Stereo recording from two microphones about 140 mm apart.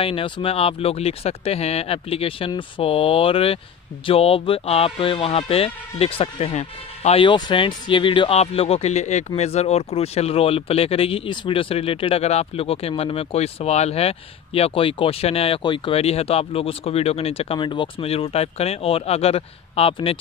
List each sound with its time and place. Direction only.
0.0 s speech: 40° left (ahead or behind)